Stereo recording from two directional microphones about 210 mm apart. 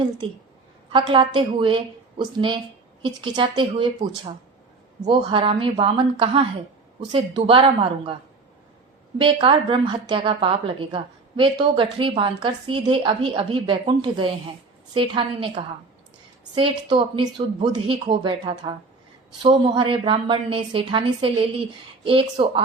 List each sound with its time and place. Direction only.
0.9 s a woman's voice: 25° right (ahead or behind)
5.0 s a woman's voice: 25° right (ahead or behind)
9.1 s a woman's voice: 25° right (ahead or behind)